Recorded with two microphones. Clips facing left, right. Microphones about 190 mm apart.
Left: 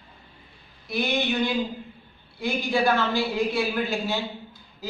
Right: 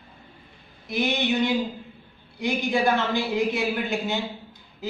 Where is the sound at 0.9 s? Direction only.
20° right (ahead or behind).